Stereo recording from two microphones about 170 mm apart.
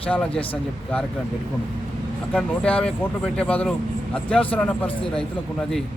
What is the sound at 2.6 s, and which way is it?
A man's voice, 5° left (ahead or behind).